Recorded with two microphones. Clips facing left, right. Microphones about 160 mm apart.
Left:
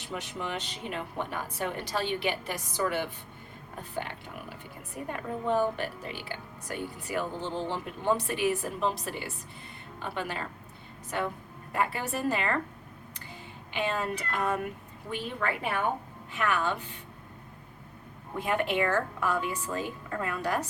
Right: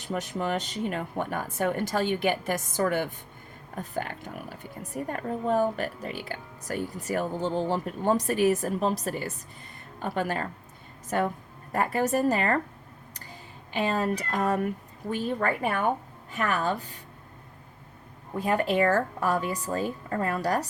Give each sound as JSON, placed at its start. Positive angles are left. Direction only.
{"t": 0.0, "sound": "a woman's voice", "side_deg": -45}
{"t": 13.7, "sound": "a woman's voice", "side_deg": -40}
{"t": 18.3, "sound": "a woman's voice", "side_deg": -35}